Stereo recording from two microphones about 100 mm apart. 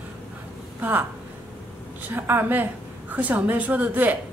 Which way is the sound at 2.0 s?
20° right (ahead or behind).